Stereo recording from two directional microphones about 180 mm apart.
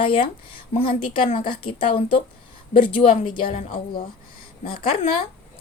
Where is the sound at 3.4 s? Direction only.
50° left (ahead or behind).